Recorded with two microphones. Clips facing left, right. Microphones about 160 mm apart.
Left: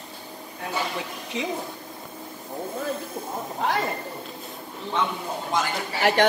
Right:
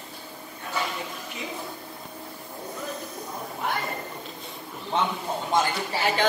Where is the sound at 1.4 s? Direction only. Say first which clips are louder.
Left 9 dB; 90° left.